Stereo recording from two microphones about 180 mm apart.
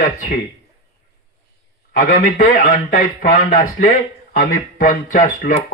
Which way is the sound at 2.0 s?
50° left (ahead or behind).